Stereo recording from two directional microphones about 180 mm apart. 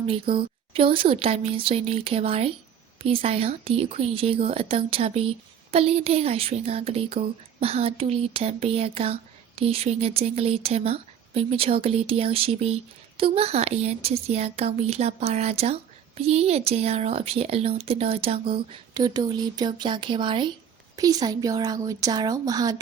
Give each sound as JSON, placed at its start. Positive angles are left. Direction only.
{"t": 0.0, "sound": "speech", "side_deg": -30}